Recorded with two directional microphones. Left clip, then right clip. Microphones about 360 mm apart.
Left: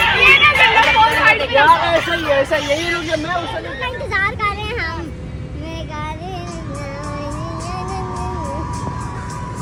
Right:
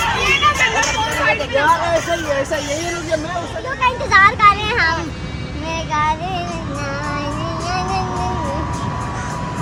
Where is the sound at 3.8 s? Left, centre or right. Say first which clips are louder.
Right 8 dB; right.